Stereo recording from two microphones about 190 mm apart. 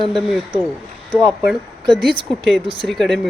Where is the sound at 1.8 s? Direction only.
20° right (ahead or behind).